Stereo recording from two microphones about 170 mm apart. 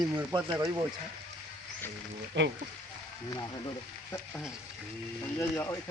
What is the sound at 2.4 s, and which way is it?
Speech, 90° right.